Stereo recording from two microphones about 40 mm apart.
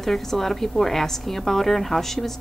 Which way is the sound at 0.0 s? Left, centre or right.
Centre.